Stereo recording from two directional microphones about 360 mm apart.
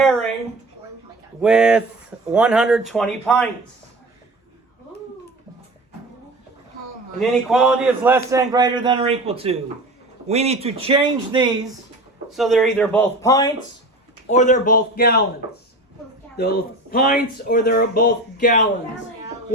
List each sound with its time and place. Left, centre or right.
0.0 s a sound: centre
1.4 s speech: centre
7.2 s a man's voice: centre
12.3 s speech: centre
14.3 s speech: left
16.4 s speech: left